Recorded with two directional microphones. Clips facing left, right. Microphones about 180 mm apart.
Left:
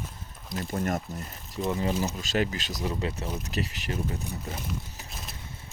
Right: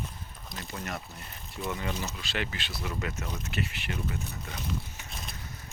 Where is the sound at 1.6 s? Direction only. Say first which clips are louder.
Left 6 dB; 35° left (ahead or behind).